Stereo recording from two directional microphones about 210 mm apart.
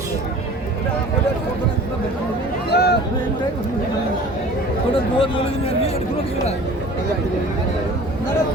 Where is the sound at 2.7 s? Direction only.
50° left (ahead or behind).